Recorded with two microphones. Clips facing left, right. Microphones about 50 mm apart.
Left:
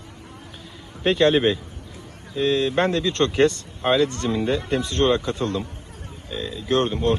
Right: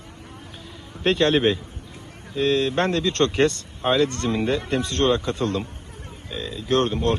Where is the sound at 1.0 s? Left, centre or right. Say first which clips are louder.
Left 1 dB; centre.